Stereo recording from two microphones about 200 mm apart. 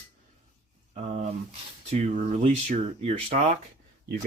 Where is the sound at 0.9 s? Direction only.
35° right (ahead or behind).